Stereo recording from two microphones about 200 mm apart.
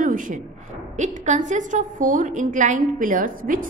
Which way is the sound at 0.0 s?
40° right (ahead or behind).